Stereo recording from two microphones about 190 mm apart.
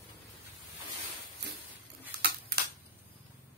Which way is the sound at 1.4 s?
65° right (ahead or behind).